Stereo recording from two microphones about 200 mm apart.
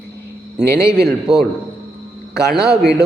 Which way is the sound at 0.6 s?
15° left (ahead or behind).